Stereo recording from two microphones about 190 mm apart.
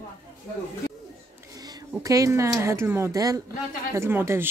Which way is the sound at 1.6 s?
15° right (ahead or behind).